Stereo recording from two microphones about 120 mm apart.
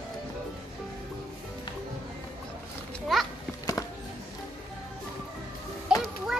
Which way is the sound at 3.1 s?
Centre (ahead or behind).